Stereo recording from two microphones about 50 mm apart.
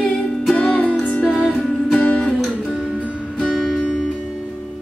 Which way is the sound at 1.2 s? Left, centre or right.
Centre.